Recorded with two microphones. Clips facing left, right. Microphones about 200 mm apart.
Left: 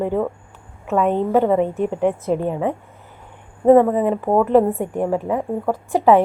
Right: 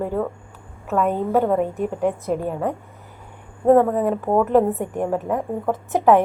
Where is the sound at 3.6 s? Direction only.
5° left (ahead or behind).